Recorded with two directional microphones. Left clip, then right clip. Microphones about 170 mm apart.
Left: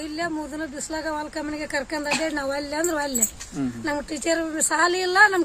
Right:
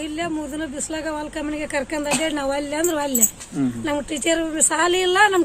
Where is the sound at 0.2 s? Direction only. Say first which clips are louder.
Right 1 dB; 5° left (ahead or behind).